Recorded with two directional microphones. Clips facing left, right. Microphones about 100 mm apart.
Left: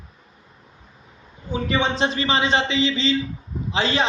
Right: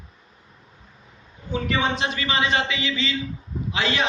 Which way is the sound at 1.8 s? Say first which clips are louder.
Left 3 dB; 30° left (ahead or behind).